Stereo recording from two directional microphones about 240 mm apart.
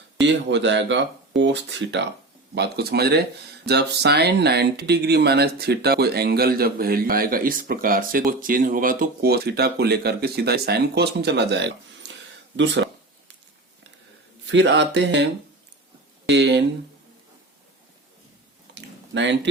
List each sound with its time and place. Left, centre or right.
0.2 s speech: right
14.4 s speech: right
18.7 s a sound: right